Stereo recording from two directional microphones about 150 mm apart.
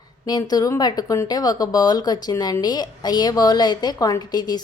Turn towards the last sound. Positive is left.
turn(degrees=25)  # may be behind; listen again after turning